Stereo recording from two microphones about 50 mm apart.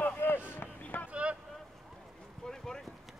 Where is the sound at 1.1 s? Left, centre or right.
Right.